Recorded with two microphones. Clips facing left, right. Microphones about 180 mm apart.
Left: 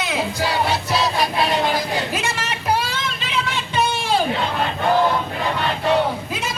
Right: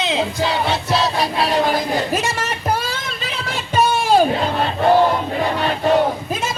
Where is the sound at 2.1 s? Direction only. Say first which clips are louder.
Right 4 dB; 45° right (ahead or behind).